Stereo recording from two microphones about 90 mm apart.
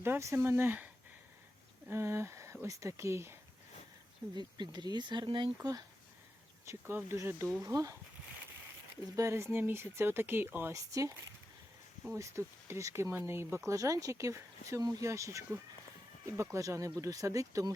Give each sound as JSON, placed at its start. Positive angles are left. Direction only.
{"t": 0.0, "sound": "speech", "side_deg": -30}
{"t": 1.9, "sound": "speech", "side_deg": -30}
{"t": 4.4, "sound": "speech", "side_deg": -55}
{"t": 6.7, "sound": "speech", "side_deg": -30}
{"t": 9.1, "sound": "speech", "side_deg": -30}
{"t": 10.8, "sound": "speech", "side_deg": -40}
{"t": 12.1, "sound": "speech", "side_deg": -35}